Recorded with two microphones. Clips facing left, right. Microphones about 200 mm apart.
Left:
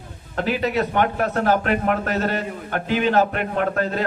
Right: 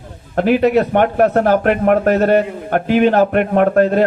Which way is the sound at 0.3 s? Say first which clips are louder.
Right 9 dB; 55° right (ahead or behind).